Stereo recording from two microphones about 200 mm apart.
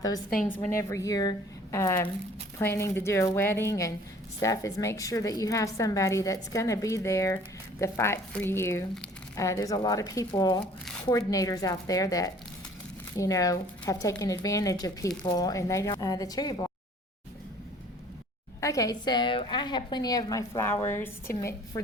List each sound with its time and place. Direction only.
0.8 s speech: 15° left (ahead or behind)
18.6 s a woman's voice: 15° left (ahead or behind)